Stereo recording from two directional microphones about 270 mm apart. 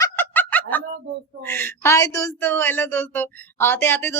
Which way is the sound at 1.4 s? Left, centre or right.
Centre.